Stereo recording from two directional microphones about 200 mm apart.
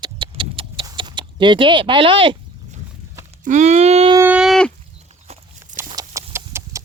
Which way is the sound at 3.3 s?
35° right (ahead or behind).